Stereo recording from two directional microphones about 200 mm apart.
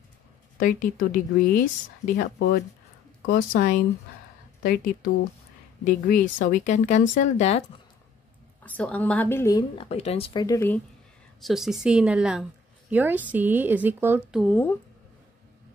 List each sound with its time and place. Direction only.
0.6 s speech: 40° left (ahead or behind)
3.3 s speech: 45° left (ahead or behind)
8.6 s a woman's voice: 5° left (ahead or behind)
9.8 s speech: 30° left (ahead or behind); by 10.8 s 15° left (ahead or behind)
11.4 s a woman's voice: centre (ahead or behind)
14.4 s a woman's voice: 10° left (ahead or behind)